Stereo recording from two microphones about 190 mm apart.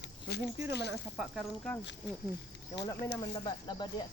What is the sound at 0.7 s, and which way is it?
Speech, 60° left (ahead or behind).